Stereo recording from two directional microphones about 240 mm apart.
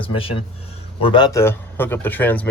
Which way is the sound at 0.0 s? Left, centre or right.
Left.